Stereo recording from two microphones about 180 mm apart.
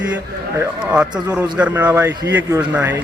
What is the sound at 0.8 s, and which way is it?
A man's voice, 5° right (ahead or behind).